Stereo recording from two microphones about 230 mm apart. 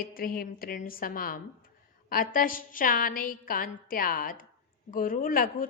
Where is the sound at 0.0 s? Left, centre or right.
Left.